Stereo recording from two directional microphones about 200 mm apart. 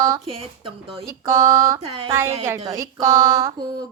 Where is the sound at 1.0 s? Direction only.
15° right (ahead or behind).